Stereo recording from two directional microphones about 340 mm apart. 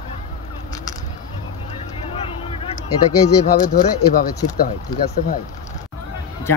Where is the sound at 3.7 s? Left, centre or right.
Left.